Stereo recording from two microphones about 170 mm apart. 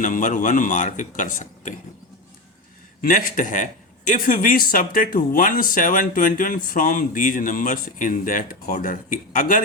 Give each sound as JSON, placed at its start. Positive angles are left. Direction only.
{"t": 0.0, "sound": "speech", "side_deg": 50}
{"t": 3.0, "sound": "speech", "side_deg": 55}